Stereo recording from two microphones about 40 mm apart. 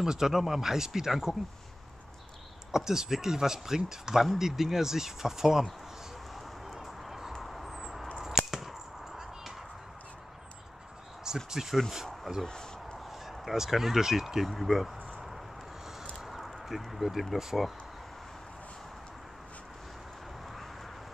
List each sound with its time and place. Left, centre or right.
0.0 s speech: centre
2.7 s speech: centre
6.7 s a sound: centre
7.3 s vehicle: centre
8.3 s whip: centre
11.3 s a sound: centre
12.3 s speech: centre
13.4 s speech: centre
16.3 s a sound: centre
17.4 s speech: centre